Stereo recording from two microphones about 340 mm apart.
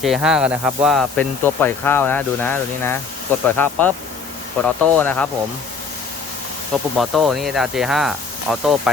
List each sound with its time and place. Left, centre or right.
0.0 s speech: centre
6.9 s speech: centre